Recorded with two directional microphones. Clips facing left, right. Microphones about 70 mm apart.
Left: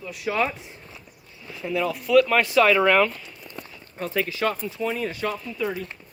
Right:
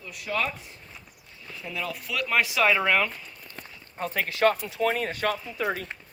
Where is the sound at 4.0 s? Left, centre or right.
Right.